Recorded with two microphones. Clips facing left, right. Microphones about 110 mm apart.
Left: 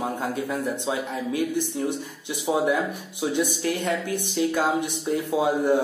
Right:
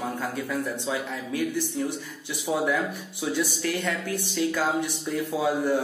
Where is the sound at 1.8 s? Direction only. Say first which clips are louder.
Left 3 dB; 15° left (ahead or behind).